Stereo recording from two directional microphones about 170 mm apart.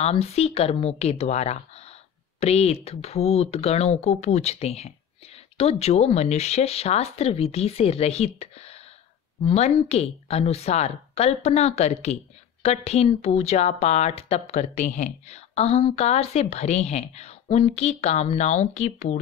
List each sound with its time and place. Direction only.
0.0 s speech: 40° left (ahead or behind)